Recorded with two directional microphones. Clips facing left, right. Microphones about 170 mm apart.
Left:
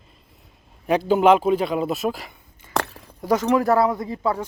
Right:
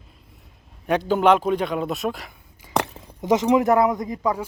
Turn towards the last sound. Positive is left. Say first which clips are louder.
# even
turn(degrees=-15)  # may be behind; listen again after turning